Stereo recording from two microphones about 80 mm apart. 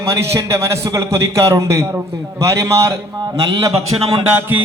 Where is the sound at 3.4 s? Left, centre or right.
Right.